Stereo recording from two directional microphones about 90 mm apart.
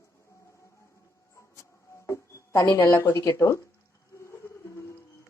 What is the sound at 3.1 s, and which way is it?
Speech, 35° left (ahead or behind).